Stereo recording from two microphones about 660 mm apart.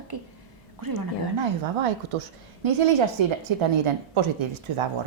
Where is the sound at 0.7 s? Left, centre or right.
Right.